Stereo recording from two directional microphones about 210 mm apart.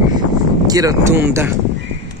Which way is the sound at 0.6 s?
15° right (ahead or behind).